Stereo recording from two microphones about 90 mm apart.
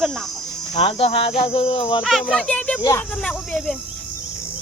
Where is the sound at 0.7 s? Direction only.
90° left.